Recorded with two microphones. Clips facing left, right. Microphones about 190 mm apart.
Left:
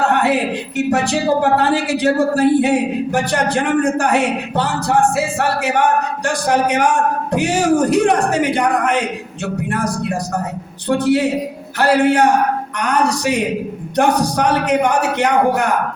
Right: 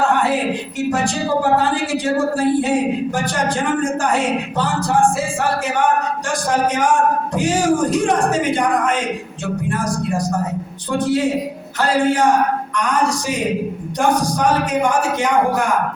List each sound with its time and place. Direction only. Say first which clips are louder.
0.9 s speech: left 3 dB; 65° left (ahead or behind)